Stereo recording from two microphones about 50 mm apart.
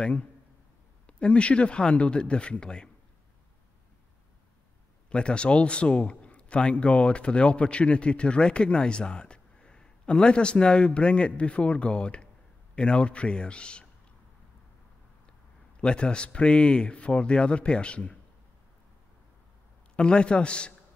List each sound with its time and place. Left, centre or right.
0.0 s a man's voice: left
5.1 s a man's voice: left
15.8 s a man's voice: centre
20.0 s a man's voice: centre